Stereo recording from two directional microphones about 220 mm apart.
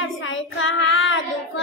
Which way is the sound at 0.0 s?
60° left (ahead or behind).